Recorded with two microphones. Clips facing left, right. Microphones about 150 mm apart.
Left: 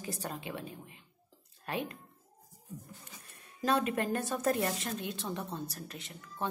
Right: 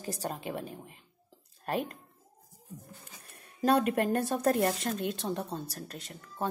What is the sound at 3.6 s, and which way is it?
A woman's voice, 55° right (ahead or behind).